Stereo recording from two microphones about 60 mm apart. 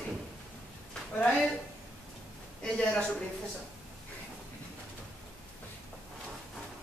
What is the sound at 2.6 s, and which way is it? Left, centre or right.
Speech, centre.